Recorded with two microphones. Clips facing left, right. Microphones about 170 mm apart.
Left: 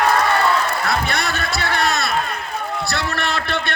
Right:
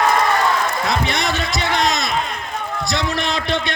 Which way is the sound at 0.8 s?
20° right (ahead or behind).